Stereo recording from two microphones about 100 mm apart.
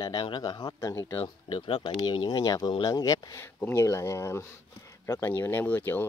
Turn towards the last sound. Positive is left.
turn(degrees=20)  # may be behind; listen again after turning